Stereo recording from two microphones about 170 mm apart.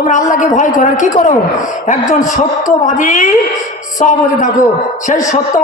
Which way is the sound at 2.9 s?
50° left (ahead or behind).